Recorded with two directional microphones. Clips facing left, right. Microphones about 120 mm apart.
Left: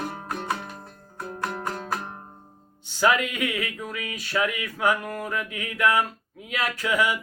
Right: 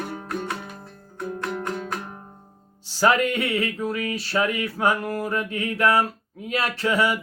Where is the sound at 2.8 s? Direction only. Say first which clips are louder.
Right 3 dB; 35° right (ahead or behind).